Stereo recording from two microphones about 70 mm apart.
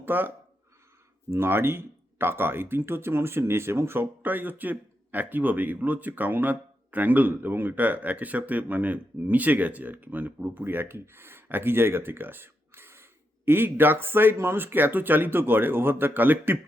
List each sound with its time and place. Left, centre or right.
0.0 s speech: right